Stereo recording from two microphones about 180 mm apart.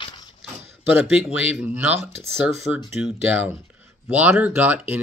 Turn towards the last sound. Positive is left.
turn(degrees=-10)  # may be behind; listen again after turning